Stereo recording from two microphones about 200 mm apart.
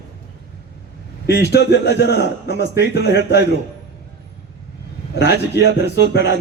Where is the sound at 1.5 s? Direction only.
55° left (ahead or behind).